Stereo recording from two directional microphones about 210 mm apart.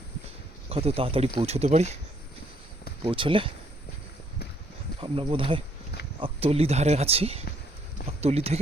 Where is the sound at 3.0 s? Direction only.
25° right (ahead or behind).